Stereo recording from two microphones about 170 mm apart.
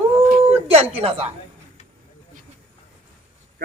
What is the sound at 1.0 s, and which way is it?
Speech, 35° right (ahead or behind).